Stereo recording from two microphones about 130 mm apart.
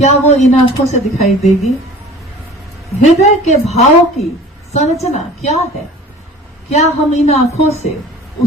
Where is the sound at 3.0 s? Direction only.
60° left (ahead or behind).